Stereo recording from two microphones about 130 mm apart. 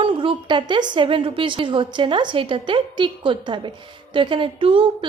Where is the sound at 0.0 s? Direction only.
40° right (ahead or behind).